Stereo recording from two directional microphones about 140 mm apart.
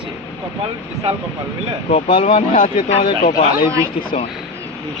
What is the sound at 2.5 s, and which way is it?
Speech, 75° left (ahead or behind).